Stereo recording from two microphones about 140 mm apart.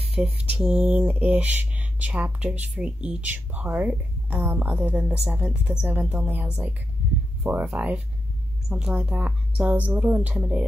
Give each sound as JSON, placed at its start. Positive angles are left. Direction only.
{"t": 0.1, "sound": "speech", "side_deg": -5}